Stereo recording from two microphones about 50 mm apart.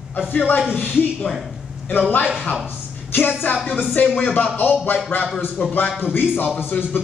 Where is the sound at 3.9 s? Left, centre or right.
Left.